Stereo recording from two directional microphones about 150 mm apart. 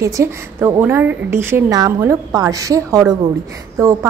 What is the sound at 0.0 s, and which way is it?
A woman's voice, 20° right (ahead or behind).